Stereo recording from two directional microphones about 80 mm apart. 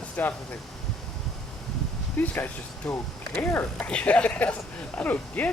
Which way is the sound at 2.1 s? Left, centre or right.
Left.